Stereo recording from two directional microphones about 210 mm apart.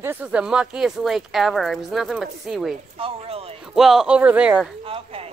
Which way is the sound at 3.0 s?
30° right (ahead or behind).